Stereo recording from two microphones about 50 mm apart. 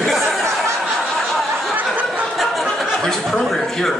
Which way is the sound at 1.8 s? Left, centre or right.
Right.